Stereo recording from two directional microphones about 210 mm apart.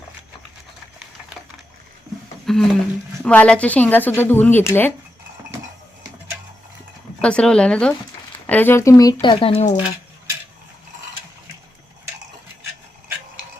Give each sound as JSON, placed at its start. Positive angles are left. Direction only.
{"t": 2.5, "sound": "speech", "side_deg": 0}
{"t": 7.2, "sound": "speech", "side_deg": 5}